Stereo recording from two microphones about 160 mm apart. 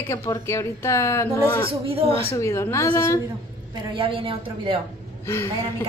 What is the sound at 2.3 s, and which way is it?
Speech, 20° left (ahead or behind).